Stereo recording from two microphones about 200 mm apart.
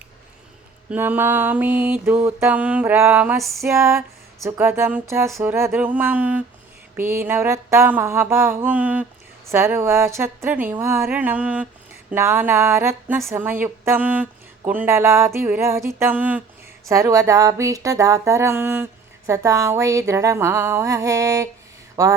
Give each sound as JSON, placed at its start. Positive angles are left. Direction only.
{"t": 0.9, "sound": "mantra", "side_deg": -10}